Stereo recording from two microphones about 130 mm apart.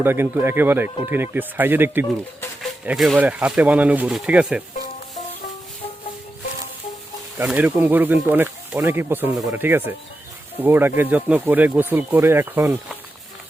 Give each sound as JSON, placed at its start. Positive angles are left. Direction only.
{"t": 0.0, "sound": "speech", "side_deg": -15}
{"t": 2.8, "sound": "speech", "side_deg": -5}
{"t": 7.4, "sound": "speech", "side_deg": -10}